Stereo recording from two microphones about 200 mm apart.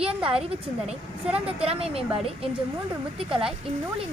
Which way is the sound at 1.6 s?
30° right (ahead or behind).